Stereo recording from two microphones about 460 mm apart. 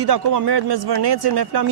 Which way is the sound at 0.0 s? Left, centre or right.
Right.